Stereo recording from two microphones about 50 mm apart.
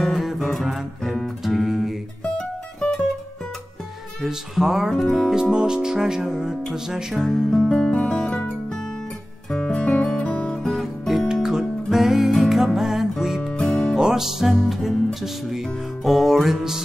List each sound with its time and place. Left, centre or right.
0.0 s music: centre
1.5 s guitar: centre
2.3 s music: centre
4.2 s speech: centre
4.9 s music: centre
5.3 s speech: centre
7.2 s music: centre
9.5 s music: centre
10.7 s music: centre
11.4 s music: centre
13.5 s music: centre
13.9 s music: centre